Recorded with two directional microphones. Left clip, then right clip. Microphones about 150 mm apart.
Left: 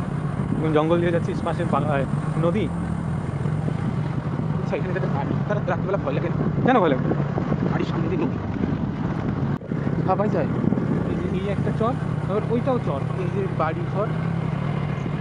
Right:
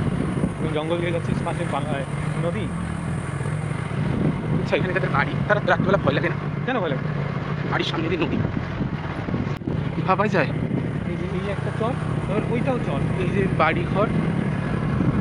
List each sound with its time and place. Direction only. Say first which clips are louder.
0.7 s speech: left 5 dB; 65° left (ahead or behind)
5.5 s speech: right 6 dB; 10° left (ahead or behind)
6.6 s speech: left 6 dB; 65° left (ahead or behind)
10.0 s speech: right 2 dB; 10° left (ahead or behind)
13.6 s speech: right 5 dB; 5° right (ahead or behind)